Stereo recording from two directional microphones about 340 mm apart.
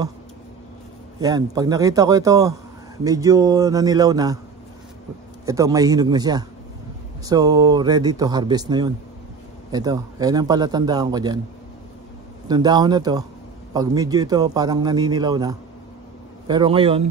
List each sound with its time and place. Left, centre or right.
1.2 s a man's voice: centre
5.4 s a man's voice: centre
12.4 s a man's voice: centre